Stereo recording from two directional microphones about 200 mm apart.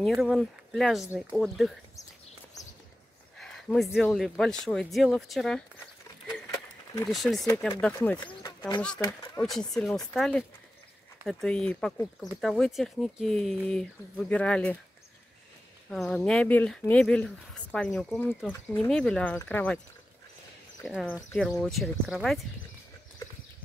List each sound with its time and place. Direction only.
0.0 s speech: centre (ahead or behind)
3.3 s speech: centre (ahead or behind)
7.1 s speech: centre (ahead or behind)
7.4 s speech: 15° left (ahead or behind)
8.2 s speech: 20° left (ahead or behind)
9.4 s speech: 5° left (ahead or behind)
15.9 s speech: centre (ahead or behind)
20.8 s speech: centre (ahead or behind)
23.2 s clip-clop: 15° left (ahead or behind)